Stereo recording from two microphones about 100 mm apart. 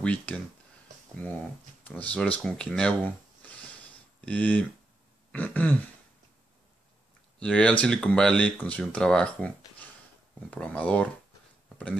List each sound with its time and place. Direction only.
0.0 s speech: 10° left (ahead or behind)
7.3 s speech: 10° left (ahead or behind)